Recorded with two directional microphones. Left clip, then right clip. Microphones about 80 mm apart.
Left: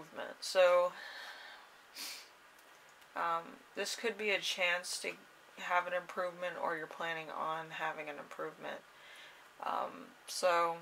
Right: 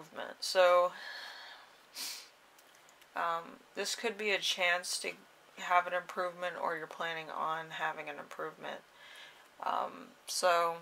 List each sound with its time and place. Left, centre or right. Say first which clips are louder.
0.1 s speech: right 2 dB; right
2.0 s snort: right 3 dB; right
3.1 s speech: right 1 dB; right